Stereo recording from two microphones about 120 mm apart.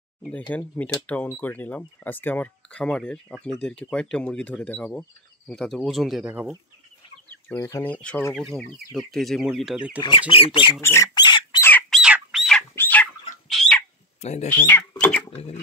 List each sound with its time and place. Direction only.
0.2 s speech: 10° left (ahead or behind)
7.5 s speech: 30° left (ahead or behind)
7.8 s speech: 10° left (ahead or behind); by 9.9 s 5° right (ahead or behind)
10.3 s speech: 50° left (ahead or behind)
10.8 s speech: 20° left (ahead or behind)
11.1 s squawk: 40° left (ahead or behind)
11.9 s bird: 5° right (ahead or behind)
12.7 s chicken: 15° left (ahead or behind)
14.2 s speech: 70° left (ahead or behind)
14.5 s speech: 15° left (ahead or behind)